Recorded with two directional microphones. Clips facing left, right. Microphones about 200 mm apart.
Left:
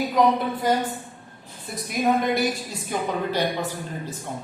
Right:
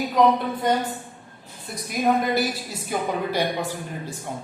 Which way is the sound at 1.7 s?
Centre (ahead or behind).